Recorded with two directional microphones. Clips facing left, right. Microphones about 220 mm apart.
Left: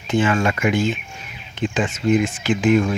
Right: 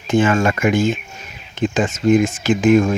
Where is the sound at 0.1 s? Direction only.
45° right (ahead or behind).